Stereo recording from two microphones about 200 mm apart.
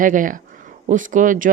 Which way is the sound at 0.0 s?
40° right (ahead or behind).